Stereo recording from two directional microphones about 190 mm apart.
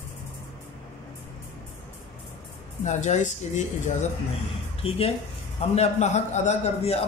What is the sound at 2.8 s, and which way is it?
A man's voice, 40° left (ahead or behind).